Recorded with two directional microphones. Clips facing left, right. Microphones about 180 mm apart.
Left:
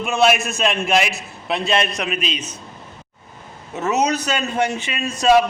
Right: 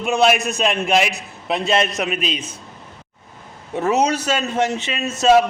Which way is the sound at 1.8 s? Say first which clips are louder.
Right 2 dB; 45° right (ahead or behind).